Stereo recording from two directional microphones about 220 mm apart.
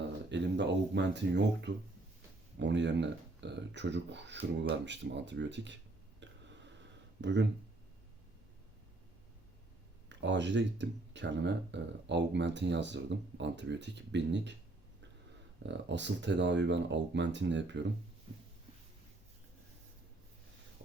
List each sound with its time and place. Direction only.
0.3 s speech: 55° right (ahead or behind)
7.2 s speech: 55° right (ahead or behind)
10.1 s speech: 55° right (ahead or behind)
15.6 s speech: 55° right (ahead or behind)